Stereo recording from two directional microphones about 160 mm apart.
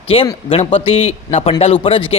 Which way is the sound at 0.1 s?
35° left (ahead or behind).